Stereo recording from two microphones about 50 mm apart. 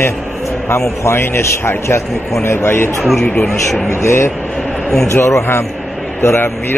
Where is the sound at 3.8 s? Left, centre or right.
Left.